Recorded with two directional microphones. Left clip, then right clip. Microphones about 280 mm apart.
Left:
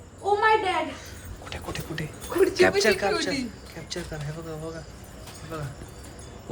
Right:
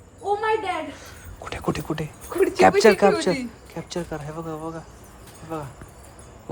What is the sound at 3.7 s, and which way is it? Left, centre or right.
Speech, centre.